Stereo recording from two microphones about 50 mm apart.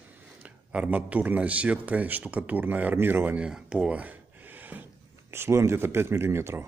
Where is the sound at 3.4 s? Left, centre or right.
Centre.